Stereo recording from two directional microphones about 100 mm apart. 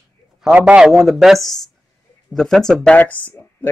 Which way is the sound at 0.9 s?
Centre (ahead or behind).